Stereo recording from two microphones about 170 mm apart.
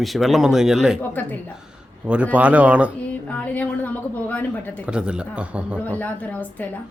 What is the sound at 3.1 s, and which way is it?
A woman's voice, 10° left (ahead or behind).